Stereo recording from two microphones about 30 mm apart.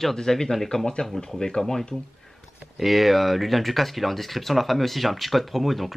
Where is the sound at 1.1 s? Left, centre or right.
Centre.